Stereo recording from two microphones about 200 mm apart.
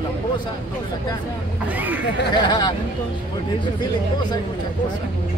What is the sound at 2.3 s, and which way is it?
Speech, 20° left (ahead or behind).